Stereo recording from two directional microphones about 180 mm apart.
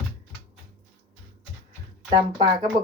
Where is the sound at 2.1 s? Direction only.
25° right (ahead or behind).